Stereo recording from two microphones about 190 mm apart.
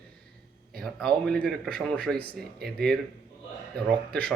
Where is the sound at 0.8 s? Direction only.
Centre (ahead or behind).